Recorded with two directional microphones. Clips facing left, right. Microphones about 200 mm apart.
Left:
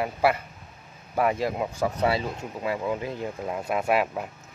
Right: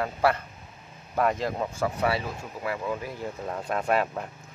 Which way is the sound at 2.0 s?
25° left (ahead or behind).